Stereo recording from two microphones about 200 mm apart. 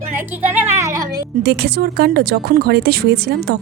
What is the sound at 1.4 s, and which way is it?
Speech, 50° right (ahead or behind).